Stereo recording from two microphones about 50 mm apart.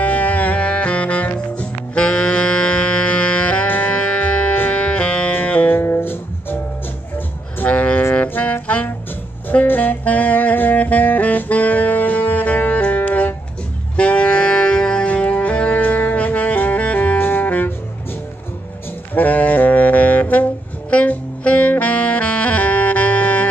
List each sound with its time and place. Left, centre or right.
0.0 s music: left
2.0 s saxophone: centre
3.6 s music: left
5.7 s music: left
7.7 s music: left
8.1 s saxophone: left
15.0 s saxophone: left
19.1 s saxophone: left